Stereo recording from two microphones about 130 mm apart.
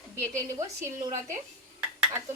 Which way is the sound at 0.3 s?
25° right (ahead or behind).